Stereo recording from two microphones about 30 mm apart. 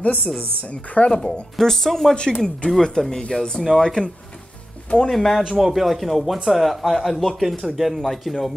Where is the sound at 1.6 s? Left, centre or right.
Centre.